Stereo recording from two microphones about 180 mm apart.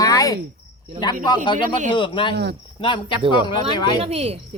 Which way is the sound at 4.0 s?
35° right (ahead or behind).